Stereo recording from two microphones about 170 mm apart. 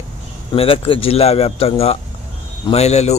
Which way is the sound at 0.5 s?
35° left (ahead or behind).